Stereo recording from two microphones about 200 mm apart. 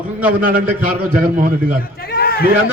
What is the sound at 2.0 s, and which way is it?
Speech, 50° left (ahead or behind).